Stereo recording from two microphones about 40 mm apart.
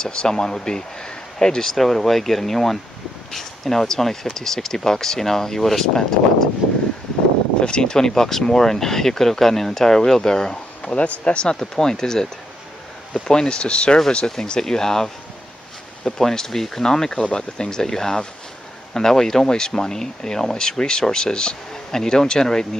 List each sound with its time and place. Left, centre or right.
0.0 s speech: centre
7.6 s speech: centre
10.9 s speech: left
11.4 s speech: centre
14.3 s speech: centre
16.1 s speech: centre
17.1 s speech: left